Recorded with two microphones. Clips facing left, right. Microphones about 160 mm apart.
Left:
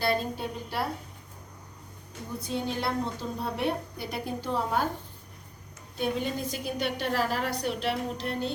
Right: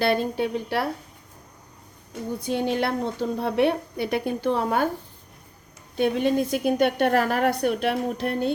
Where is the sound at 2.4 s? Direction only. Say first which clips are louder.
Right 6 dB; 70° right (ahead or behind).